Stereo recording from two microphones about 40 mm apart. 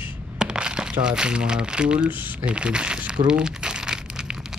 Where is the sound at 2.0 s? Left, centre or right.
Right.